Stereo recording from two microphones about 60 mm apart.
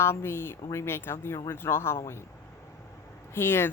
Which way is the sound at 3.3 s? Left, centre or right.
Left.